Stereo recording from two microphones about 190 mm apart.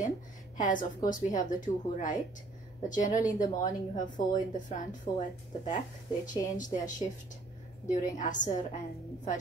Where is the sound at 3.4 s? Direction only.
40° left (ahead or behind).